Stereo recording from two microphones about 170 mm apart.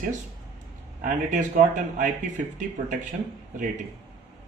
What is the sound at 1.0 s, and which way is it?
Speech, 50° right (ahead or behind).